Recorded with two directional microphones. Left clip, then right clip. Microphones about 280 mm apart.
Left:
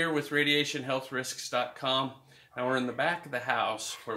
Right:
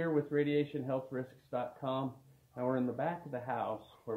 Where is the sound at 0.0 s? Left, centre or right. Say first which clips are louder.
Left 5 dB; left.